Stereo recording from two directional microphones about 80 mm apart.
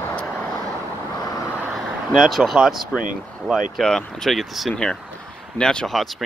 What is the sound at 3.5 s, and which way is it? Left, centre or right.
Speech, centre.